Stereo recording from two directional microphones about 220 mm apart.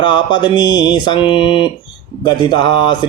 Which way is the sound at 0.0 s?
20° left (ahead or behind).